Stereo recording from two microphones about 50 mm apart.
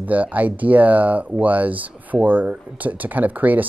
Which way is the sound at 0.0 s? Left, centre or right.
Right.